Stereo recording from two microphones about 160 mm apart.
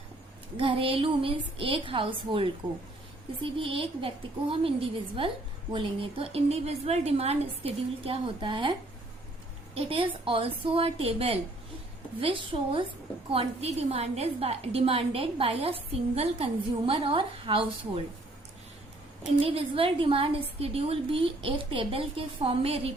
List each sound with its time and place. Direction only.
0.5 s a woman's voice: 35° right (ahead or behind)
3.6 s a woman's voice: 35° right (ahead or behind)
9.7 s a woman's voice: 35° right (ahead or behind)
19.4 s a woman's voice: 35° right (ahead or behind)